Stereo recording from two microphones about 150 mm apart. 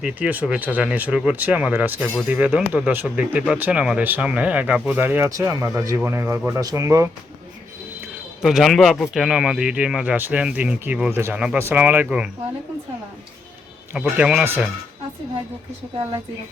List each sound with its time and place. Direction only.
0.0 s speech: 10° right (ahead or behind)
8.4 s speech: centre (ahead or behind)
13.9 s speech: 5° right (ahead or behind)